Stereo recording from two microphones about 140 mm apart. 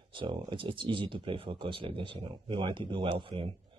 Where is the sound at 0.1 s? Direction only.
35° right (ahead or behind).